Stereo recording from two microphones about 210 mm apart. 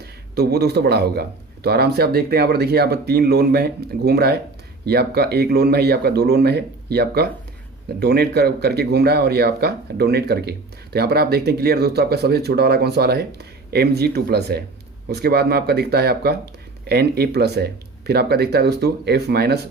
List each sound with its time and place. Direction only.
0.0 s speech: 50° right (ahead or behind)